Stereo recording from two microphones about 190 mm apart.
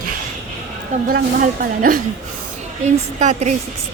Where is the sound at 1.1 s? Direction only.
45° right (ahead or behind).